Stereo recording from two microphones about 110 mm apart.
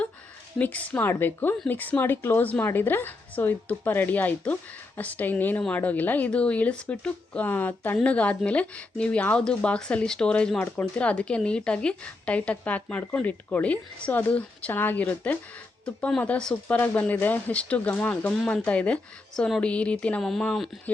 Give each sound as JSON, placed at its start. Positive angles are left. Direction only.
{"t": 0.6, "sound": "speech", "side_deg": 15}